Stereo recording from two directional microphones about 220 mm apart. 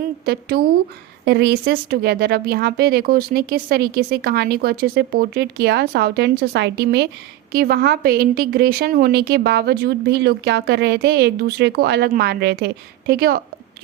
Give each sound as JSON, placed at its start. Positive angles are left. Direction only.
{"t": 0.3, "sound": "speech", "side_deg": -45}